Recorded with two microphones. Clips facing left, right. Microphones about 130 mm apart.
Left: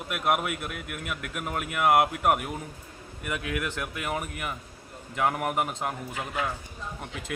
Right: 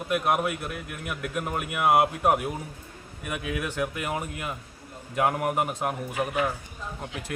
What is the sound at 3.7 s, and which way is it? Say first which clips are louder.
Speech: right 3 dB; 15° right (ahead or behind).